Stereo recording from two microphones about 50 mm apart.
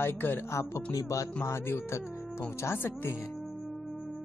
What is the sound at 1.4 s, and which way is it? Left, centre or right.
Speech, left.